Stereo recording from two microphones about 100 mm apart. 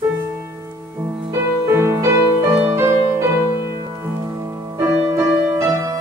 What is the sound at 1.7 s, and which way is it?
Music, 25° right (ahead or behind).